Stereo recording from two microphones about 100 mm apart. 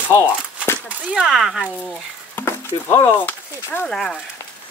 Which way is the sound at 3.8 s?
5° left (ahead or behind).